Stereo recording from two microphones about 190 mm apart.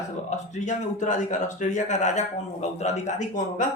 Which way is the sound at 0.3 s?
40° left (ahead or behind).